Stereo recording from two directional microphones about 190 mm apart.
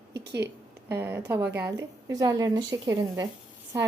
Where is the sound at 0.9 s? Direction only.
10° right (ahead or behind).